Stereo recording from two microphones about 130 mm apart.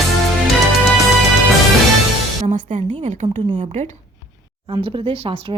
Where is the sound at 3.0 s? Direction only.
65° right (ahead or behind).